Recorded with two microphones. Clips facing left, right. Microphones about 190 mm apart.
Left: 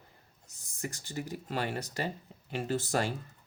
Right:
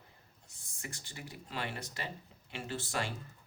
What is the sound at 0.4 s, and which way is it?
Speech, 40° left (ahead or behind).